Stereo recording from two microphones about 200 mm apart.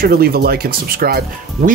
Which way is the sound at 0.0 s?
50° right (ahead or behind).